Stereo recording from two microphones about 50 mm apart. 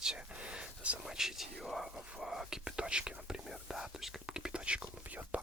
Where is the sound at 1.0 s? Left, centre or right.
Centre.